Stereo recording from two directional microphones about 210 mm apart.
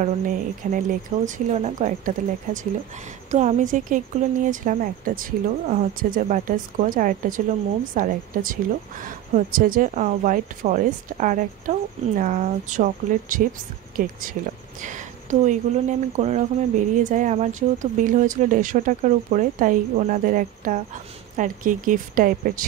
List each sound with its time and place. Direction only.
0.0 s speech: 40° right (ahead or behind)